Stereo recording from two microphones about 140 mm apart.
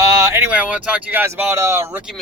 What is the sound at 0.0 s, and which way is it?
Speech, 20° right (ahead or behind).